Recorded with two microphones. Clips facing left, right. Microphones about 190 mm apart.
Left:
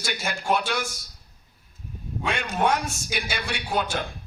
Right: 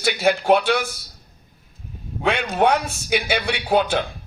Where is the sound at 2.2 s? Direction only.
60° right (ahead or behind).